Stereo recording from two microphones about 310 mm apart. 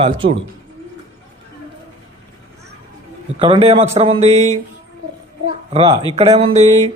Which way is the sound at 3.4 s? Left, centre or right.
Centre.